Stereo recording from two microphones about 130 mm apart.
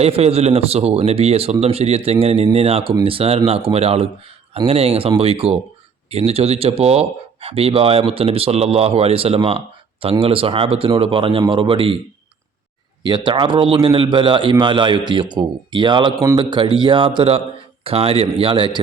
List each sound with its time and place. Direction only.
0.0 s speech: 50° right (ahead or behind)
13.1 s speech: 40° right (ahead or behind)